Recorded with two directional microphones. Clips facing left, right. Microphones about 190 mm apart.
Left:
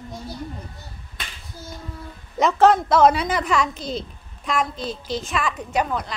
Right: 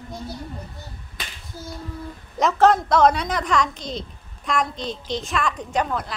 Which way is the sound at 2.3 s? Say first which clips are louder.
Left 1 dB; centre (ahead or behind).